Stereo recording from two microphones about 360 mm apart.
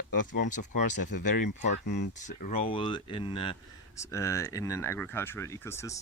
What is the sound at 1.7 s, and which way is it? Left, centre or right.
Speech, left.